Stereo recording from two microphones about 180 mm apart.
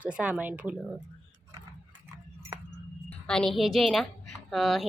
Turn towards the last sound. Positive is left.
turn(degrees=0)  # may be behind; listen again after turning